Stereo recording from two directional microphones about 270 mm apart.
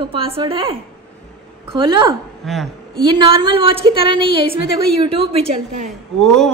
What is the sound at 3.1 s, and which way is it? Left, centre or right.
Speech, centre.